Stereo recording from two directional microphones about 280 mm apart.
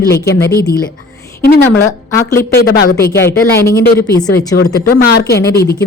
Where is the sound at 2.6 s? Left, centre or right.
Left.